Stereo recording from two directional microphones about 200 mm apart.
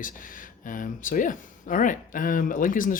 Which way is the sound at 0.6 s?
40° left (ahead or behind).